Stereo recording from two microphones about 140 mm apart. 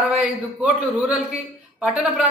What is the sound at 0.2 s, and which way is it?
A woman's voice, 10° right (ahead or behind).